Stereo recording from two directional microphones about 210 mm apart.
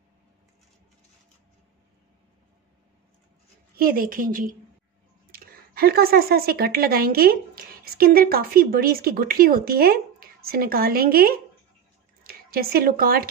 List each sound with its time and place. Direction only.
3.7 s a woman's voice: 45° right (ahead or behind)